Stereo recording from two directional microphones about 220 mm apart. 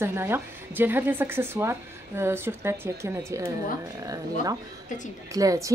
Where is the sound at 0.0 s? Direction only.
10° right (ahead or behind).